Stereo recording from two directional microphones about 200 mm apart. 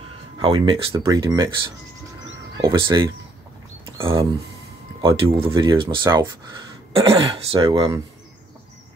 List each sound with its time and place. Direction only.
0.4 s speech: 25° right (ahead or behind)
2.5 s speech: 25° right (ahead or behind)
5.0 s speech: 25° right (ahead or behind)